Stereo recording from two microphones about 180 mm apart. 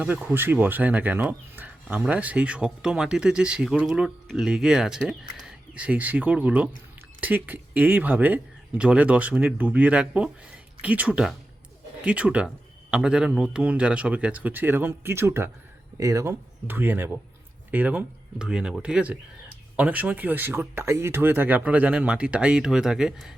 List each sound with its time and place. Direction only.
0.0 s speech: 5° right (ahead or behind)